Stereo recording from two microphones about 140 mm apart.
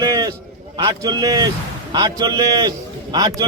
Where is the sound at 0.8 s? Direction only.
30° right (ahead or behind).